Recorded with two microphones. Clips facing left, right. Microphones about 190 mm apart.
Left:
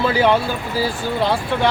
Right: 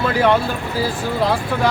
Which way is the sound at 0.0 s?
Centre (ahead or behind).